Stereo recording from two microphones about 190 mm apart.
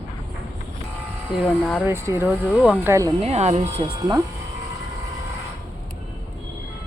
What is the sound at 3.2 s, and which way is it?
Speech, 35° right (ahead or behind).